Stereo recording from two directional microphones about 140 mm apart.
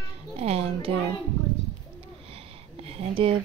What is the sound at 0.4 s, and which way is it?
Music, 45° right (ahead or behind).